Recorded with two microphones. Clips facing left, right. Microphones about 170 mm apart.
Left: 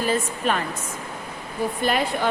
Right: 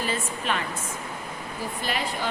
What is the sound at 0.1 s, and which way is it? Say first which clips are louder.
Speech: left 5 dB; 45° left (ahead or behind).